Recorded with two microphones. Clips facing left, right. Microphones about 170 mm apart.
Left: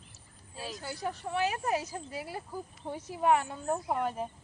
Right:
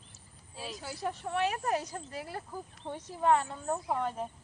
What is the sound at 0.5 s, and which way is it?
Speech, centre (ahead or behind).